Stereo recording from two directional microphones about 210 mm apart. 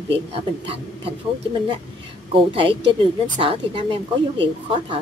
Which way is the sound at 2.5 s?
25° right (ahead or behind).